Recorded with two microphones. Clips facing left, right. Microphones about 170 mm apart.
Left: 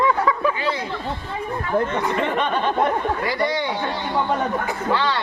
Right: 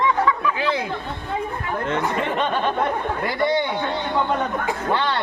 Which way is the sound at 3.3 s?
55° right (ahead or behind).